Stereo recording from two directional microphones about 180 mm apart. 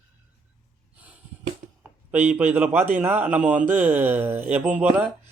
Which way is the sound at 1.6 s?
50° right (ahead or behind).